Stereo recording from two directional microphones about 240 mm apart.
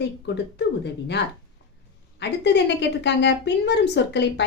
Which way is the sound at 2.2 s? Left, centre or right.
Left.